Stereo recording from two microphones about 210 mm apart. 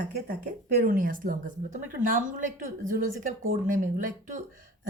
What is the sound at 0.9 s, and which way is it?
A woman's voice, 40° right (ahead or behind).